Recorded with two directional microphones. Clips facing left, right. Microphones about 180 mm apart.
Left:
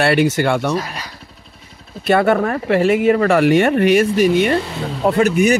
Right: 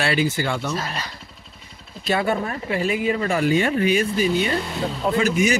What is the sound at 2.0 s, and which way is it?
A man's voice, 70° left (ahead or behind).